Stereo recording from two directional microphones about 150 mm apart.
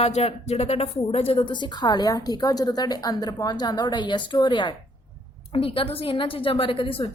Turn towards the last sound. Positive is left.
turn(degrees=35)  # may be behind; listen again after turning